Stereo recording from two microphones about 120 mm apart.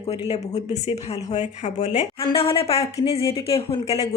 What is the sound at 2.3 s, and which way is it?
Speech, 50° left (ahead or behind).